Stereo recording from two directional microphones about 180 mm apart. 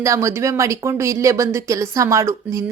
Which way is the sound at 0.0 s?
15° right (ahead or behind).